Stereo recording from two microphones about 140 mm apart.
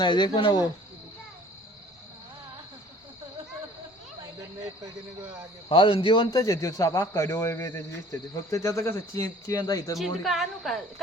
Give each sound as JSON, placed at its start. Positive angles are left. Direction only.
{"t": 0.0, "sound": "speech", "side_deg": 35}
{"t": 5.6, "sound": "a man's voice", "side_deg": 40}
{"t": 10.0, "sound": "speech", "side_deg": 0}